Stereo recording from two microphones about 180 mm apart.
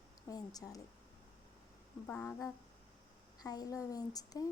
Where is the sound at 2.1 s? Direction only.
10° left (ahead or behind).